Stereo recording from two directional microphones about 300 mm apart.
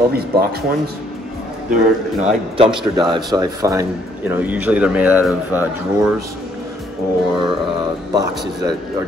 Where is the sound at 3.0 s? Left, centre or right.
Centre.